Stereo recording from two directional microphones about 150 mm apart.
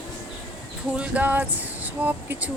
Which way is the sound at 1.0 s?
10° right (ahead or behind).